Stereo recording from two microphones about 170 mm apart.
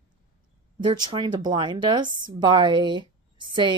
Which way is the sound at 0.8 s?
25° right (ahead or behind).